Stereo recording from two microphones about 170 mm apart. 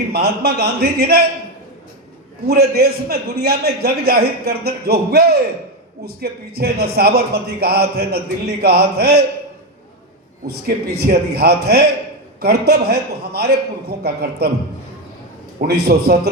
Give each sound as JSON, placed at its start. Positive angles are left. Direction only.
{"t": 0.1, "sound": "a man's voice", "side_deg": -70}
{"t": 2.5, "sound": "a man's voice", "side_deg": -70}
{"t": 10.4, "sound": "a man's voice", "side_deg": -70}
{"t": 15.6, "sound": "a man's voice", "side_deg": -65}